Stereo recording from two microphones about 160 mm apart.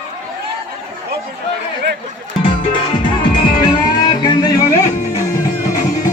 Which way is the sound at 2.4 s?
35° left (ahead or behind).